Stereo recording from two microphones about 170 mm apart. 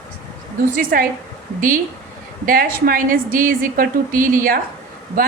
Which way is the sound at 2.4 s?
60° right (ahead or behind).